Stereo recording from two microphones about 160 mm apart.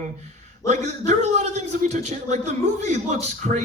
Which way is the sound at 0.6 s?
45° right (ahead or behind).